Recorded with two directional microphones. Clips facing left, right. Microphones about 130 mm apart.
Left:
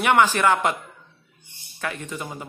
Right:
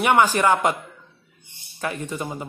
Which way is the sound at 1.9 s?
40° right (ahead or behind).